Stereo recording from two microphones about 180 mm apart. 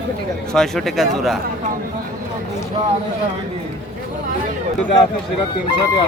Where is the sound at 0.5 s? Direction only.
Centre (ahead or behind).